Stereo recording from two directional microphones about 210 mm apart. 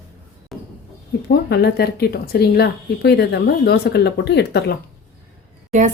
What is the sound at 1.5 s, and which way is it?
Speech, 50° left (ahead or behind).